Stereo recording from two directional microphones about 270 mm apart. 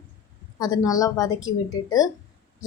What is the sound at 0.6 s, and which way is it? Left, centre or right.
A woman's voice, centre.